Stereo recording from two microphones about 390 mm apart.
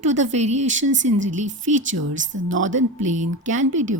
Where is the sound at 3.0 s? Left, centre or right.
Centre.